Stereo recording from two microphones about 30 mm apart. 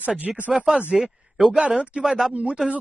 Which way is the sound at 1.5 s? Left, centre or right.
Right.